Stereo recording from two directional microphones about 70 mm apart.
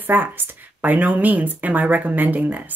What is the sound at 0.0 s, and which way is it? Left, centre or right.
A woman's voice, right.